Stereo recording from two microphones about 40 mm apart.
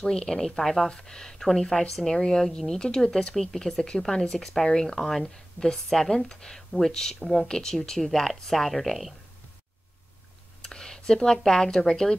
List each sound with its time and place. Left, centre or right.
0.0 s speech: centre
10.7 s speech: centre